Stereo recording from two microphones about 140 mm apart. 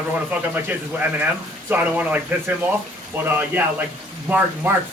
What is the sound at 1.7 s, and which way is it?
Speech, 10° right (ahead or behind).